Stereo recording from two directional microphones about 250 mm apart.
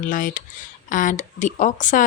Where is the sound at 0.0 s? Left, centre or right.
Left.